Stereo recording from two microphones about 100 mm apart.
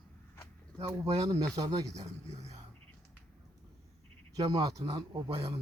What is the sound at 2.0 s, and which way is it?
Speech, 90° right.